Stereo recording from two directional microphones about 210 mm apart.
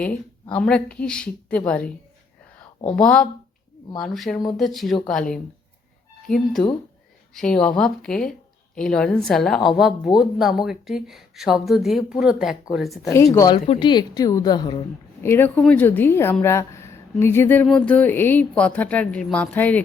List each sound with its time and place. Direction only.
0.5 s speech: 5° left (ahead or behind)
2.9 s speech: 5° left (ahead or behind)
13.3 s a woman's voice: 15° left (ahead or behind)